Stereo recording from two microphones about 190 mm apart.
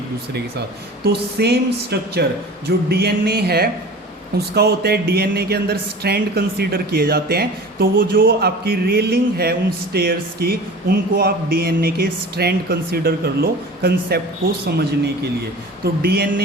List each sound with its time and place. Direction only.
1.0 s speech: 60° right (ahead or behind)
2.6 s a sound: 55° right (ahead or behind)
4.4 s speech: 55° right (ahead or behind)
15.8 s speech: 55° right (ahead or behind)